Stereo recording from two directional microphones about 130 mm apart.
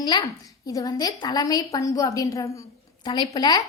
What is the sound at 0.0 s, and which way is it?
A woman's voice, 35° left (ahead or behind).